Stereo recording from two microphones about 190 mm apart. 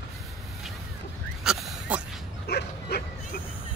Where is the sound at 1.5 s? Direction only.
Centre (ahead or behind).